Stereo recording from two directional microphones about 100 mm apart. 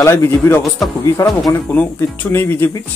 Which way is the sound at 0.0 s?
25° left (ahead or behind).